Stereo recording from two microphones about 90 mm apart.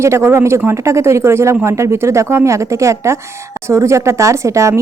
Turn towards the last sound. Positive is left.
turn(degrees=-35)  # may be behind; listen again after turning